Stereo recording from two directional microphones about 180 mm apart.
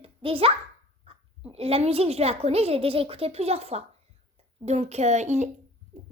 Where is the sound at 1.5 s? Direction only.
35° right (ahead or behind).